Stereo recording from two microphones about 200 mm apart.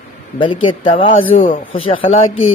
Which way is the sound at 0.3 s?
25° left (ahead or behind).